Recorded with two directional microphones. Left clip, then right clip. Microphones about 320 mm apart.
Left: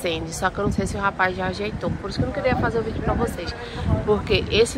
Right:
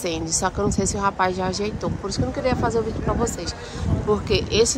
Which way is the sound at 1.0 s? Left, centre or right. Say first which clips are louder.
Even; centre.